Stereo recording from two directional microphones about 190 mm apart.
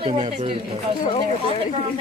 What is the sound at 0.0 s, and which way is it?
Speech, 25° right (ahead or behind).